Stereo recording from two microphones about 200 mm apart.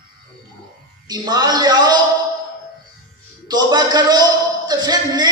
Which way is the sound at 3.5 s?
20° right (ahead or behind).